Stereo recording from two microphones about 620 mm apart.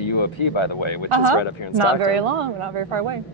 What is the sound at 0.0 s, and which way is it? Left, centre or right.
Speech, left.